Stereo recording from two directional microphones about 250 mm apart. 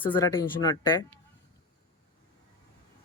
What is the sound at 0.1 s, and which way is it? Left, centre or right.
Speech, centre.